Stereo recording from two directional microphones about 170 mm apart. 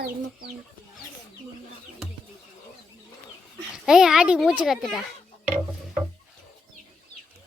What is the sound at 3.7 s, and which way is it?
Speech, 5° right (ahead or behind).